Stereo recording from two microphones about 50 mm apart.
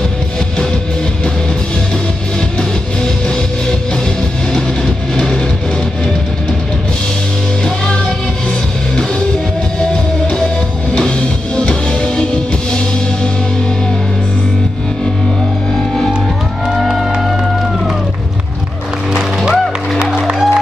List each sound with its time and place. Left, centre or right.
5.1 s vehicle: centre
10.9 s music: centre
16.6 s music: centre
19.1 s music: centre
19.6 s music: centre
20.1 s music: centre